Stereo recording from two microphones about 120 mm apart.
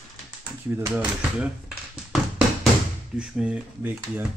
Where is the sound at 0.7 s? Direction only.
10° right (ahead or behind).